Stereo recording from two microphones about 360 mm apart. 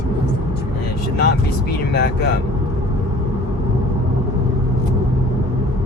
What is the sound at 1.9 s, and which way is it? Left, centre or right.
Speech, left.